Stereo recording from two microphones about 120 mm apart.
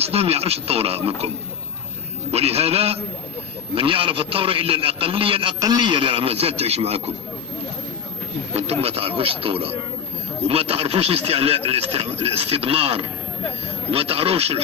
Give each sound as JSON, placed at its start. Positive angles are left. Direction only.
{"t": 0.0, "sound": "speech", "side_deg": -55}
{"t": 2.3, "sound": "a man's voice", "side_deg": -60}
{"t": 5.5, "sound": "speech", "side_deg": -30}
{"t": 8.5, "sound": "speech", "side_deg": -60}